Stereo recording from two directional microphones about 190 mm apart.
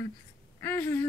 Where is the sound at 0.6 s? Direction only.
15° left (ahead or behind).